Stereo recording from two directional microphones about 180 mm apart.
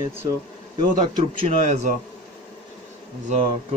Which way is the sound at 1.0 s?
40° right (ahead or behind).